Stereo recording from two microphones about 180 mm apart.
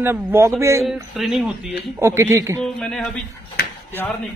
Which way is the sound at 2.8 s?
5° left (ahead or behind).